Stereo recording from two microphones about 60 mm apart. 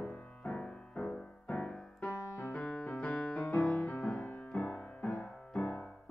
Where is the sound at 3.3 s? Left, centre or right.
Left.